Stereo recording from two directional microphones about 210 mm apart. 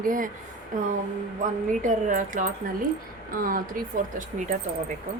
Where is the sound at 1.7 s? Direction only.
40° right (ahead or behind).